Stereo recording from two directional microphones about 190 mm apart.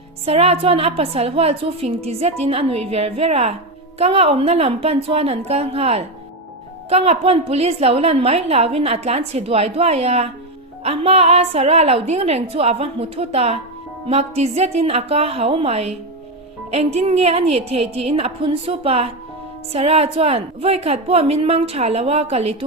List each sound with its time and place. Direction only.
0.3 s a woman's voice: 30° right (ahead or behind)